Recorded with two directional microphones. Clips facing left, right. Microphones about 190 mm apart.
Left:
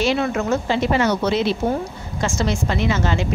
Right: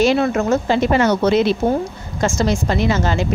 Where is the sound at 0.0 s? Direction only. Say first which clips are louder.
Right 4 dB; 45° right (ahead or behind).